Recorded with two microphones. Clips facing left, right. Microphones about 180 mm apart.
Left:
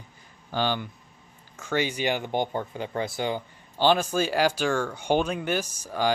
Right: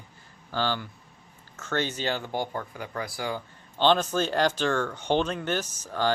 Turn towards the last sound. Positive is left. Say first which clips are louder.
# left 1 dB
turn(degrees=10)  # may be behind; listen again after turning